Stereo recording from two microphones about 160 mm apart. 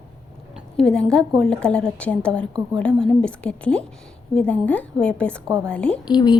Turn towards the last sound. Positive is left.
turn(degrees=25)  # may be behind; listen again after turning